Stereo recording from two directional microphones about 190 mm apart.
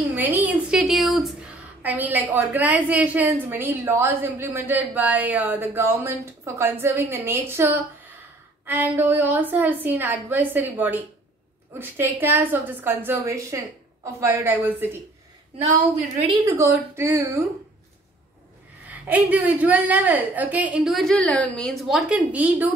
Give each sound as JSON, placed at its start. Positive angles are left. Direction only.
{"t": 0.1, "sound": "a sound", "side_deg": -10}
{"t": 1.8, "sound": "a woman's voice", "side_deg": -10}
{"t": 16.3, "sound": "a woman's voice", "side_deg": -15}
{"t": 18.9, "sound": "a woman's voice", "side_deg": -10}